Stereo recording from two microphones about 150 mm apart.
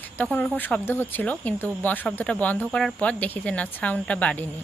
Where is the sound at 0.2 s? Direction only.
10° left (ahead or behind).